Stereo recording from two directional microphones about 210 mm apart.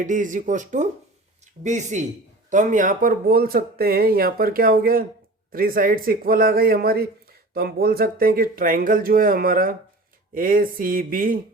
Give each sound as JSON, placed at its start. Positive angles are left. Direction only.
{"t": 0.0, "sound": "speech", "side_deg": -40}